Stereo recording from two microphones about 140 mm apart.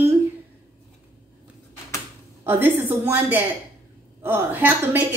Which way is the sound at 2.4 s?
15° right (ahead or behind).